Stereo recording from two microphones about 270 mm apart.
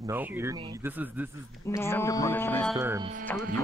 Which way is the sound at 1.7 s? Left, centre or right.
Centre.